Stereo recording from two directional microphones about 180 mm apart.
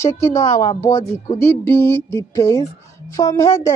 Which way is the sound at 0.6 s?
15° left (ahead or behind).